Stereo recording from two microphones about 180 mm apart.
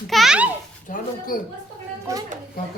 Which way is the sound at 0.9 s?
50° left (ahead or behind).